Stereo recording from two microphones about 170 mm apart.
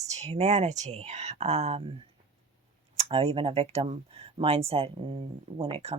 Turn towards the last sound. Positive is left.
turn(degrees=-35)  # may be behind; listen again after turning